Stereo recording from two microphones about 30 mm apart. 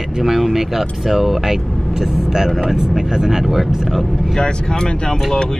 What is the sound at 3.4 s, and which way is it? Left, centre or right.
Speech, centre.